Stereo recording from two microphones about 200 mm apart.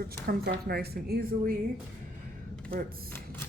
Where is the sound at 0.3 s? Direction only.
50° right (ahead or behind).